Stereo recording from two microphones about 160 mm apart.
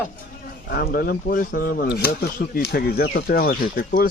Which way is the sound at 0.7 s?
70° left (ahead or behind).